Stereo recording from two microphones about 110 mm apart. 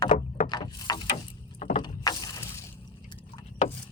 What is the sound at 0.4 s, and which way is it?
Boat, 40° left (ahead or behind).